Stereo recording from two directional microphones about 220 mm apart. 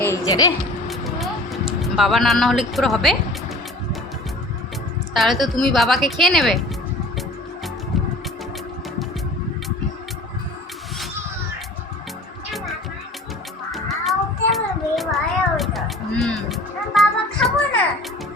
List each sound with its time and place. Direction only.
0.0 s a woman's voice: 15° left (ahead or behind)
0.9 s music: centre (ahead or behind)
1.8 s a woman's voice: centre (ahead or behind)
5.1 s a woman's voice: centre (ahead or behind)
13.7 s child singing: centre (ahead or behind)
16.2 s music: centre (ahead or behind)